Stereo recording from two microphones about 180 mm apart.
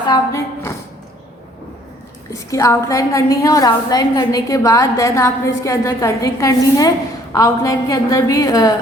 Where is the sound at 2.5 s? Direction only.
15° left (ahead or behind).